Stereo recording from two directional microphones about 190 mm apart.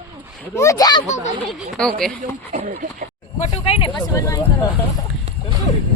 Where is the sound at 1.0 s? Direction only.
40° left (ahead or behind).